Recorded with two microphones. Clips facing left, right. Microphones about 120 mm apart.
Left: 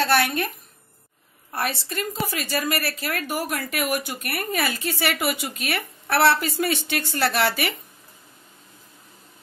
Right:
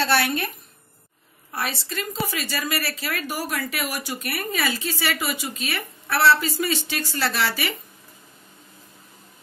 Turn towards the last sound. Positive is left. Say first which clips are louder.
# left 3 dB
turn(degrees=55)  # may be behind; listen again after turning